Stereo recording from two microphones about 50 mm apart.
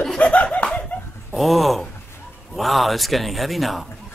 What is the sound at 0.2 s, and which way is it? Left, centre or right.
Laughter, left.